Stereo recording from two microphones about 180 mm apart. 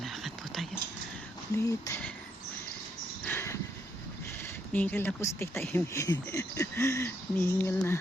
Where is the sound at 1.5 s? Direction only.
15° left (ahead or behind).